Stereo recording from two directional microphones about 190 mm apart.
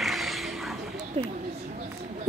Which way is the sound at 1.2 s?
30° right (ahead or behind).